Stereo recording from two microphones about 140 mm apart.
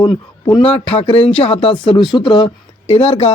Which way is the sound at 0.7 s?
40° left (ahead or behind).